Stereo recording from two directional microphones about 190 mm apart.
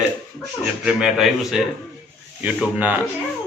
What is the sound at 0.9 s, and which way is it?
A man's voice, centre (ahead or behind).